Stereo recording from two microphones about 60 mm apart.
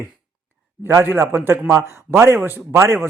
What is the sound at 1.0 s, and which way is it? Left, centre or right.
Speech, right.